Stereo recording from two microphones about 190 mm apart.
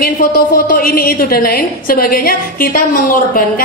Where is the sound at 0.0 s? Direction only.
50° left (ahead or behind).